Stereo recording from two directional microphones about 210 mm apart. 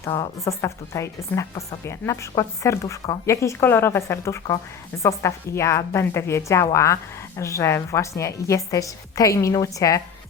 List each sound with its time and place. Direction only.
0.0 s speech: 15° left (ahead or behind)